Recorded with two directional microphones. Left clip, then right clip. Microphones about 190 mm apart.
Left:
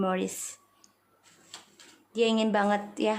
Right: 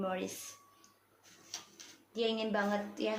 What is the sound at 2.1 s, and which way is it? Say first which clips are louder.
A woman's voice: left 8 dB; 45° left (ahead or behind).